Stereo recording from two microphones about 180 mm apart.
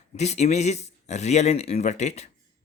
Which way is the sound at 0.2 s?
40° left (ahead or behind).